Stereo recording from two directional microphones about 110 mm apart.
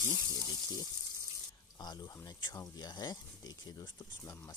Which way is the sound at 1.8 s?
40° left (ahead or behind).